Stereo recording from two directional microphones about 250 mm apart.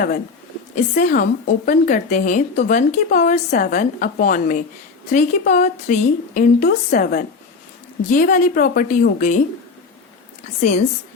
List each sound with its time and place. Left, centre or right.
0.9 s a woman's voice: left
10.6 s a woman's voice: left